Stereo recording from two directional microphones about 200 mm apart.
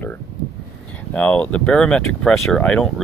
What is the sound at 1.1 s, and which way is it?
Speech, 5° left (ahead or behind).